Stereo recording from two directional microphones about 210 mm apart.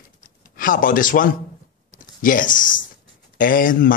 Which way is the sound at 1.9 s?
40° left (ahead or behind).